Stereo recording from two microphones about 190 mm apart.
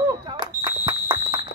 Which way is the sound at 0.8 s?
25° right (ahead or behind).